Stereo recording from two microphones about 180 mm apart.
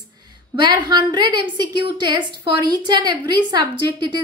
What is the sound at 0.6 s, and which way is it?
A woman's voice, 25° right (ahead or behind).